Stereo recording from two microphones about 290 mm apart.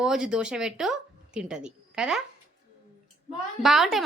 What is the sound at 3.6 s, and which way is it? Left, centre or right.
Speech, centre.